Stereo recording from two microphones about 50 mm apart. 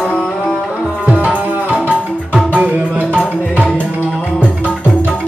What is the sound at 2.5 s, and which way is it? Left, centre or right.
Music, right.